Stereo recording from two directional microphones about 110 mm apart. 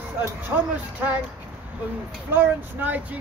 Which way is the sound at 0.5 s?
15° right (ahead or behind).